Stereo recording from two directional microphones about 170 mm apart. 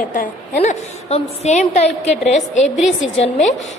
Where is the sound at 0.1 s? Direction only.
45° left (ahead or behind).